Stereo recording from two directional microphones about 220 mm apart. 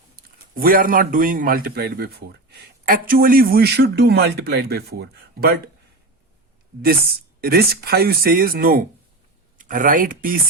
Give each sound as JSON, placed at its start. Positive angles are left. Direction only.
{"t": 0.5, "sound": "a man's voice", "side_deg": -40}
{"t": 7.4, "sound": "a man's voice", "side_deg": -45}